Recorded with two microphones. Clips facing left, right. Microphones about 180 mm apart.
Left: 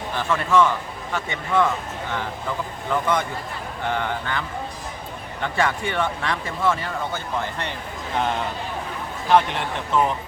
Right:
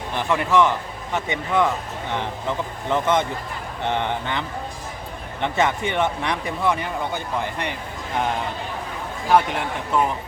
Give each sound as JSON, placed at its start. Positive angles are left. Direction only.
{"t": 0.2, "sound": "speech", "side_deg": -15}
{"t": 9.3, "sound": "speech", "side_deg": -5}